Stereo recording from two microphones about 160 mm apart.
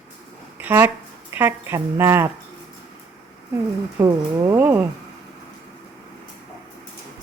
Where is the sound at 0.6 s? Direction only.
10° right (ahead or behind).